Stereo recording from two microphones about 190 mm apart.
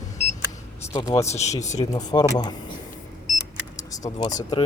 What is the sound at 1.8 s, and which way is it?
Speech, 20° left (ahead or behind).